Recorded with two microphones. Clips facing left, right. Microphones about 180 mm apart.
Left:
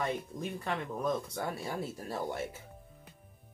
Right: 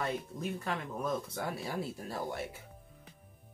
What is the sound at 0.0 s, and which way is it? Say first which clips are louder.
Speech: left 1 dB; 5° right (ahead or behind).